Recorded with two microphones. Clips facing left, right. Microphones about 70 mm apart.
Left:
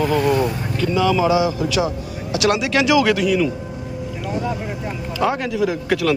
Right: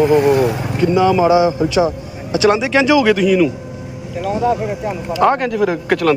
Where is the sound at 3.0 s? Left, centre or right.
Centre.